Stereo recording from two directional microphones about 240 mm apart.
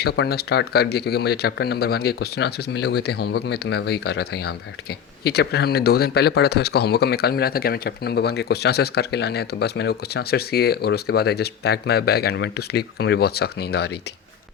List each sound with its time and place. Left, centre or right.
0.0 s speech: left